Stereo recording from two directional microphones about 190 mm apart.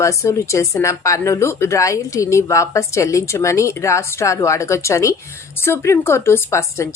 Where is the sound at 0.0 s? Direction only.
15° left (ahead or behind).